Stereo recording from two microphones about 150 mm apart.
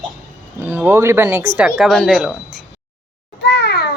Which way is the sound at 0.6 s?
15° right (ahead or behind).